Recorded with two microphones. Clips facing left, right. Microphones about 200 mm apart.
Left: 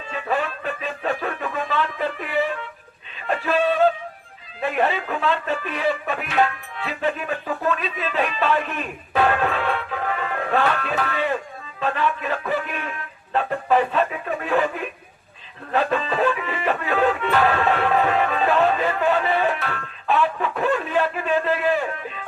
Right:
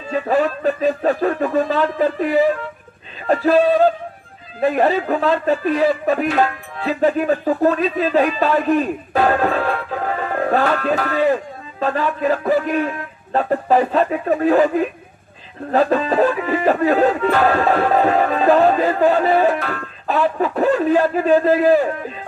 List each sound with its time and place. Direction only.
0.1 s speech: 40° right (ahead or behind)